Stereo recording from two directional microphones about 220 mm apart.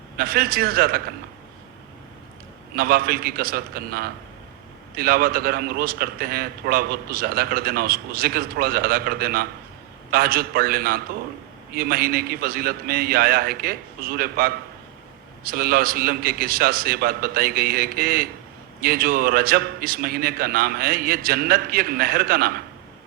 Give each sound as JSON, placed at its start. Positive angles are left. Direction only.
{"t": 0.2, "sound": "a man's voice", "side_deg": -40}
{"t": 2.7, "sound": "a man's voice", "side_deg": -45}